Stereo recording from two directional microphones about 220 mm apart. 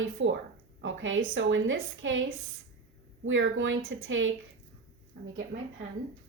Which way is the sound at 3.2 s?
60° right (ahead or behind).